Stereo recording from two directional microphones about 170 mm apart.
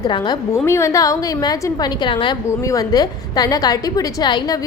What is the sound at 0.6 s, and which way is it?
A woman's voice, 15° left (ahead or behind).